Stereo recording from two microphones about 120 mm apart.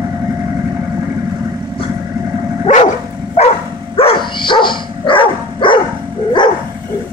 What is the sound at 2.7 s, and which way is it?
Dog, 90° left.